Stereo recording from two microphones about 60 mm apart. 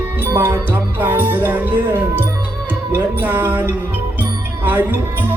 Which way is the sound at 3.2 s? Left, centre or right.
Right.